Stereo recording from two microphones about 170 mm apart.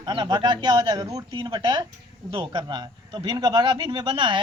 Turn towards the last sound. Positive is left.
turn(degrees=-30)  # may be behind; listen again after turning